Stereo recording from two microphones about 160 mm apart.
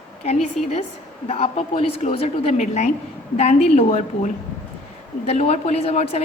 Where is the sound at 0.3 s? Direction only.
40° left (ahead or behind).